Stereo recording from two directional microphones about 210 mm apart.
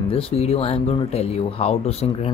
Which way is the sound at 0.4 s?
30° left (ahead or behind).